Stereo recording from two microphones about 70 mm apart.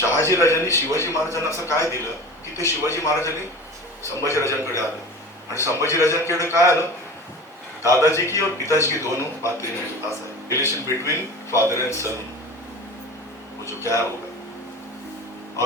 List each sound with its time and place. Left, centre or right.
0.0 s a man's voice: left
13.7 s a man's voice: left